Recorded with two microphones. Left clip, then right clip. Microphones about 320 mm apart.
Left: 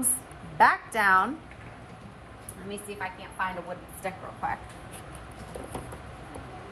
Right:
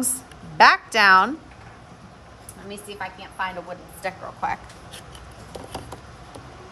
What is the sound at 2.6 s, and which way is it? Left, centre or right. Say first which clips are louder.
A woman's voice: right 2 dB; right.